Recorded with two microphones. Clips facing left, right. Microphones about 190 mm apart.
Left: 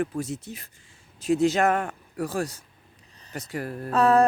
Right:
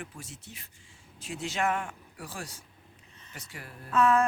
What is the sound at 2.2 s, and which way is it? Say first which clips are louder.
Speech: left 13 dB; 40° left (ahead or behind).